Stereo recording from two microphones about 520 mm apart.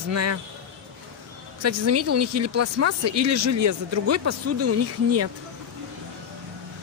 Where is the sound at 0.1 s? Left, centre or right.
Right.